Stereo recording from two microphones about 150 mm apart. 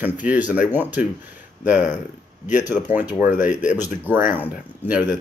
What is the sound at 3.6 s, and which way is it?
Speech, 55° left (ahead or behind).